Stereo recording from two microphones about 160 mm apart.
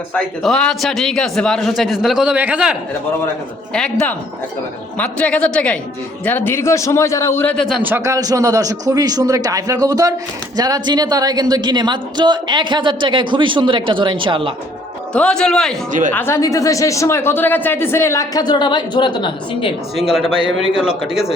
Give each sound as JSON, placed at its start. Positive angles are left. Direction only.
{"t": 0.1, "sound": "a man's voice", "side_deg": 5}
{"t": 3.7, "sound": "a man's voice", "side_deg": 5}
{"t": 7.5, "sound": "a man's voice", "side_deg": 0}
{"t": 7.8, "sound": "a man's voice", "side_deg": -10}
{"t": 15.1, "sound": "a man's voice", "side_deg": 5}
{"t": 15.9, "sound": "a woman's voice", "side_deg": -55}
{"t": 16.1, "sound": "speech", "side_deg": 15}
{"t": 20.1, "sound": "a man's voice", "side_deg": -5}